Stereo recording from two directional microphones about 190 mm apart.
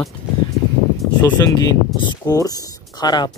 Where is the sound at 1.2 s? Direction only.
20° left (ahead or behind).